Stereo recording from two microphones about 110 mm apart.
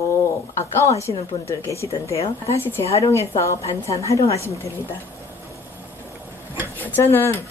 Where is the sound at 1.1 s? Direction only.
45° left (ahead or behind).